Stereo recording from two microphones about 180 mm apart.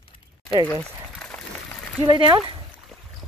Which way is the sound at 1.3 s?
10° left (ahead or behind).